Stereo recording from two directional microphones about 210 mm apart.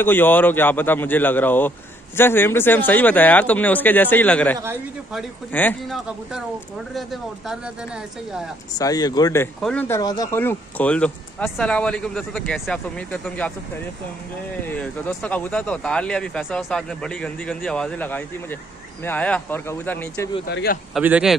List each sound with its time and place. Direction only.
0.0 s speech: 10° left (ahead or behind)
8.7 s speech: 15° left (ahead or behind)
9.6 s speech: 5° left (ahead or behind)
14.7 s speech: 5° left (ahead or behind)
20.4 s speech: 50° left (ahead or behind)
20.9 s speech: 5° right (ahead or behind)